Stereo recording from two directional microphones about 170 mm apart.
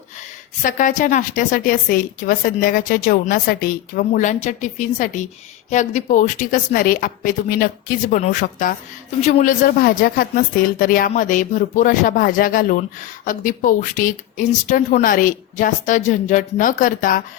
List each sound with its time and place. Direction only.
0.6 s a woman's voice: 50° left (ahead or behind)